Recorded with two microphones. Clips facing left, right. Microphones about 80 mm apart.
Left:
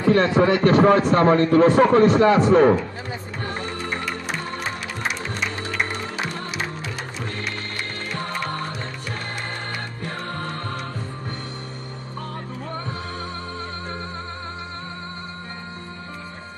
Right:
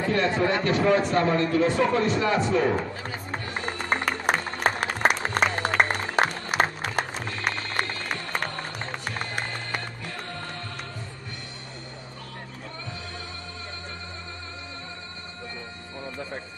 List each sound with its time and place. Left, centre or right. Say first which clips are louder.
0.0 s a man's voice: left 6 dB; left
3.6 s music: right 1 dB; right
10.0 s music: left 6 dB; left